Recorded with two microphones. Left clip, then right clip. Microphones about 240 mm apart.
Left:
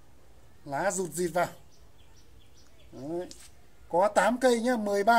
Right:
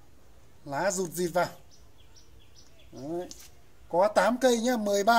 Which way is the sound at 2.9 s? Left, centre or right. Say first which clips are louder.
Even; centre.